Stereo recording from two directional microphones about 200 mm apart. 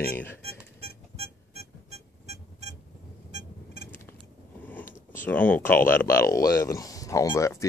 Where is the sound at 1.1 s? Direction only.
30° right (ahead or behind).